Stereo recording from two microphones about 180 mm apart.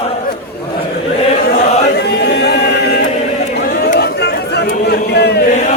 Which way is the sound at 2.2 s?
65° left (ahead or behind).